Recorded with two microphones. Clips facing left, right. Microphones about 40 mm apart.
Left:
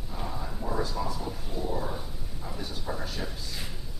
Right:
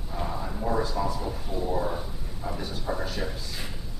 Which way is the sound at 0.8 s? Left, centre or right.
Centre.